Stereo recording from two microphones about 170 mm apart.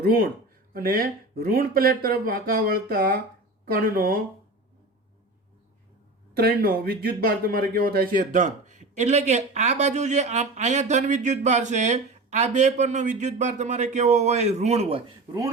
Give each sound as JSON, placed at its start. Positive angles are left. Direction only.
{"t": 0.0, "sound": "speech", "side_deg": -60}
{"t": 6.6, "sound": "speech", "side_deg": -60}